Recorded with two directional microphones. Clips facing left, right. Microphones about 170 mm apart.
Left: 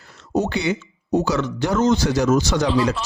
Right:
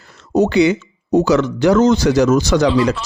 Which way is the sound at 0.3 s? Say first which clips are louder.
Right 8 dB; 90° right.